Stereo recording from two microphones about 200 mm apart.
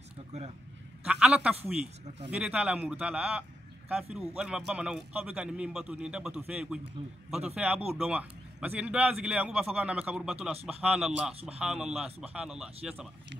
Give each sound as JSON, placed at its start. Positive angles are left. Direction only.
{"t": 1.0, "sound": "a man's voice", "side_deg": -5}
{"t": 10.5, "sound": "speech", "side_deg": -30}
{"t": 10.8, "sound": "a man's voice", "side_deg": -5}